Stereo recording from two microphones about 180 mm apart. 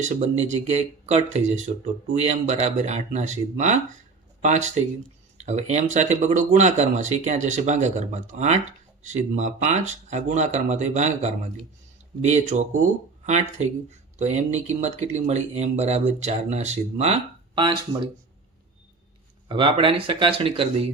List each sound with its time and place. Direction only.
0.0 s speech: 40° right (ahead or behind)
19.5 s speech: 30° right (ahead or behind)